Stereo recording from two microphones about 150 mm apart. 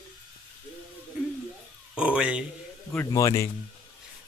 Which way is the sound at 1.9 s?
5° right (ahead or behind).